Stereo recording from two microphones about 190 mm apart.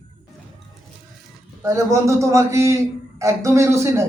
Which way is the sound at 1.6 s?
15° right (ahead or behind).